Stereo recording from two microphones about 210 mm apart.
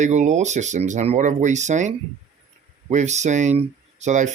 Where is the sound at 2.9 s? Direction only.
35° right (ahead or behind).